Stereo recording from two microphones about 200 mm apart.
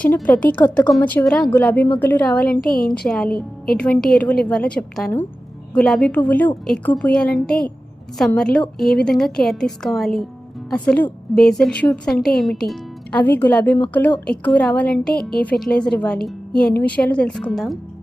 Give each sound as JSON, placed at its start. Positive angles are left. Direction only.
{"t": 0.0, "sound": "a woman's voice", "side_deg": 5}
{"t": 2.6, "sound": "speech", "side_deg": 45}
{"t": 3.0, "sound": "a woman's voice", "side_deg": 5}